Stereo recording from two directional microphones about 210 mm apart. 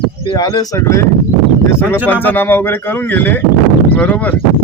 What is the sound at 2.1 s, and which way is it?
Speech, 10° left (ahead or behind).